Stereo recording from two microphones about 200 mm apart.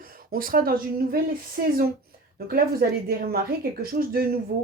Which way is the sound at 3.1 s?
50° right (ahead or behind).